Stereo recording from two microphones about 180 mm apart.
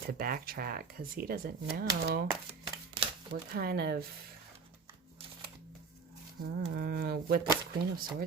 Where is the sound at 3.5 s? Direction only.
60° right (ahead or behind).